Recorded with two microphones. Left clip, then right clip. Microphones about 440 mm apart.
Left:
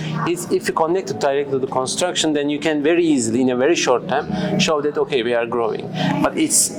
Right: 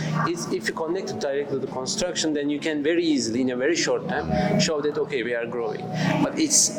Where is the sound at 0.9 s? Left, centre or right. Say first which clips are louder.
Left 7 dB; left.